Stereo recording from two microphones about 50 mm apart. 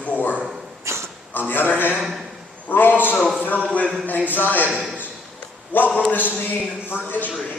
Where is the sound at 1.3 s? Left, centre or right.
Left.